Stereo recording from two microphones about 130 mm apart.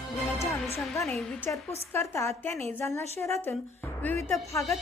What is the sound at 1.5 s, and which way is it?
A woman's voice, 20° left (ahead or behind).